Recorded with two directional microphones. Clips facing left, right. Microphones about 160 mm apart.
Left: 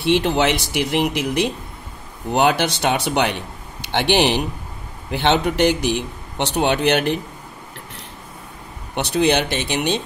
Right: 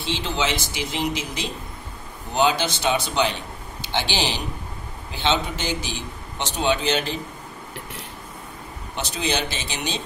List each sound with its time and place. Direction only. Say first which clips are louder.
0.0 s a man's voice: left 9 dB; 60° left (ahead or behind)
8.9 s a man's voice: left 8 dB; 65° left (ahead or behind)